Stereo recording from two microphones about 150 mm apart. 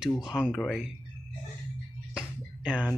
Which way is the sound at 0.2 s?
5° right (ahead or behind).